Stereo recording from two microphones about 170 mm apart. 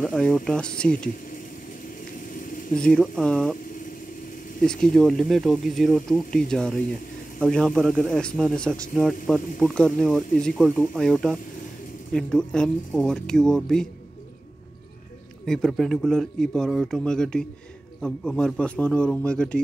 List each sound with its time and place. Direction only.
0.0 s a man's voice: 5° left (ahead or behind)
2.7 s a man's voice: 5° left (ahead or behind)
4.9 s a man's voice: 5° left (ahead or behind)
15.4 s a man's voice: 5° left (ahead or behind)